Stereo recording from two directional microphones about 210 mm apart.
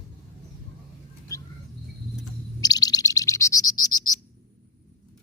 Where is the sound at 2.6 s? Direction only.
20° left (ahead or behind).